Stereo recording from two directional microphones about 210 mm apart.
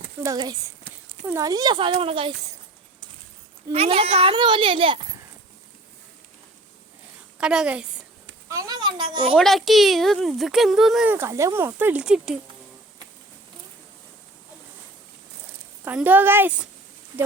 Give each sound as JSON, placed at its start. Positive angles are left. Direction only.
{"t": 0.2, "sound": "a woman's voice", "side_deg": -20}
{"t": 3.7, "sound": "a child's voice", "side_deg": -30}
{"t": 7.3, "sound": "a woman's voice", "side_deg": -5}
{"t": 8.4, "sound": "a sound", "side_deg": -15}
{"t": 9.3, "sound": "speech", "side_deg": 0}
{"t": 15.8, "sound": "a woman's voice", "side_deg": -10}